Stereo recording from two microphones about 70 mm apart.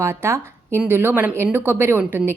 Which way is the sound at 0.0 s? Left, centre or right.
Right.